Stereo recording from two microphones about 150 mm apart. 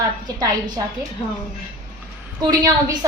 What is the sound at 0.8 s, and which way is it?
Speech, 25° right (ahead or behind).